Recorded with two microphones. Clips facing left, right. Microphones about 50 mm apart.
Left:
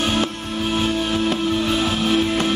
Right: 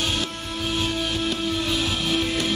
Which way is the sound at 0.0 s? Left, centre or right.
Left.